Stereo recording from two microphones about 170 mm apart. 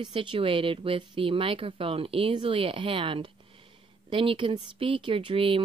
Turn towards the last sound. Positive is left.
turn(degrees=-30)  # may be behind; listen again after turning